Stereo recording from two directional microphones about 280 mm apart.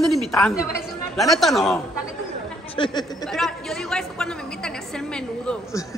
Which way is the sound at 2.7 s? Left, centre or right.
Centre.